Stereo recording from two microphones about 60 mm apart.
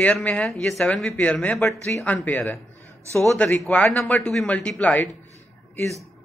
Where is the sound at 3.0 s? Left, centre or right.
Right.